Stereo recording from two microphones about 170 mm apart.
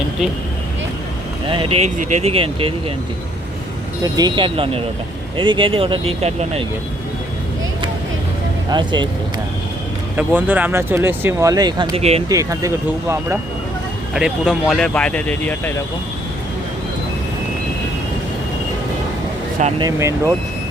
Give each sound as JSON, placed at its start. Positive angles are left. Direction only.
{"t": 1.5, "sound": "speech", "side_deg": -30}
{"t": 1.8, "sound": "speech", "side_deg": -45}
{"t": 4.0, "sound": "speech", "side_deg": -25}
{"t": 8.7, "sound": "speech", "side_deg": -25}
{"t": 10.2, "sound": "speech", "side_deg": -10}
{"t": 11.9, "sound": "speech", "side_deg": -35}
{"t": 12.3, "sound": "speech", "side_deg": -20}
{"t": 14.1, "sound": "speech", "side_deg": -5}
{"t": 19.8, "sound": "speech", "side_deg": -15}